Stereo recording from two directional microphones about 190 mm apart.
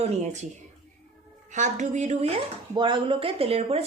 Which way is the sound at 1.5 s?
40° right (ahead or behind).